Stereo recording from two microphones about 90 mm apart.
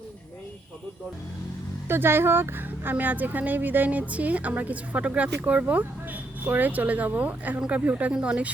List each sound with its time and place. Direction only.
1.9 s speech: 25° right (ahead or behind)